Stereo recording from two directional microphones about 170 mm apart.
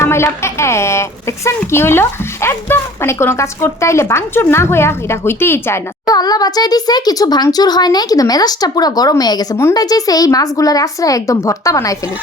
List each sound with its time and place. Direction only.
0.0 s a woman's voice: 15° left (ahead or behind)